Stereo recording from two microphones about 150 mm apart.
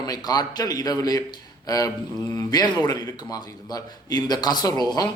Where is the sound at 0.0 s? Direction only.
25° left (ahead or behind).